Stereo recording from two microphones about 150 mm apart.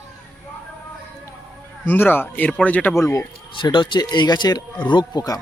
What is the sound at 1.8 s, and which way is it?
Speech, 15° left (ahead or behind).